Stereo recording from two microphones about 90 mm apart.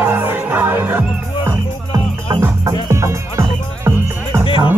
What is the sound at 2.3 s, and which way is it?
Music, 50° right (ahead or behind).